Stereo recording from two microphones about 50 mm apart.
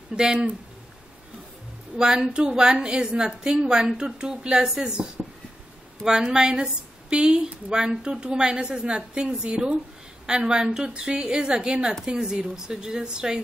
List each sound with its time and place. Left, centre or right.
0.1 s a woman's voice: centre
2.0 s a woman's voice: centre
6.3 s a woman's voice: centre